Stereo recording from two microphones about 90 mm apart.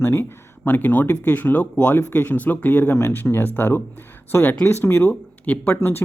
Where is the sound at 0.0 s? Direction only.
25° left (ahead or behind).